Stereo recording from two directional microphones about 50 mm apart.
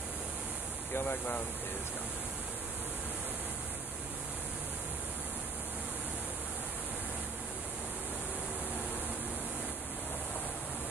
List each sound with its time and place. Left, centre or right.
0.9 s speech: left